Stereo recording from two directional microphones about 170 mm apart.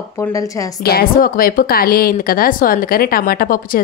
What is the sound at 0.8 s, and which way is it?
A woman's voice, 60° left (ahead or behind).